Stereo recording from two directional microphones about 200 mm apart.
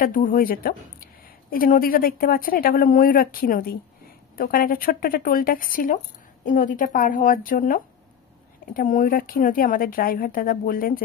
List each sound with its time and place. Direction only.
0.0 s speech: 45° left (ahead or behind)